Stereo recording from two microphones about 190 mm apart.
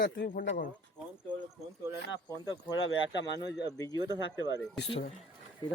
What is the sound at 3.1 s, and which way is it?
Speech, 65° left (ahead or behind).